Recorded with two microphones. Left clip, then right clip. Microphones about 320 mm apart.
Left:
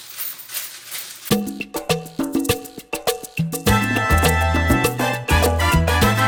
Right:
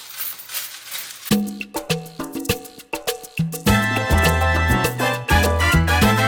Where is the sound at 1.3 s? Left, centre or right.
Left.